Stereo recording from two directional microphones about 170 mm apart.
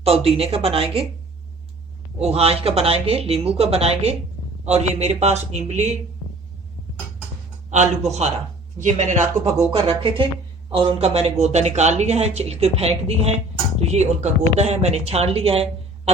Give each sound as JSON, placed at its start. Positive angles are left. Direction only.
{"t": 0.0, "sound": "speech", "side_deg": -35}
{"t": 2.1, "sound": "speech", "side_deg": -35}
{"t": 7.7, "sound": "speech", "side_deg": -40}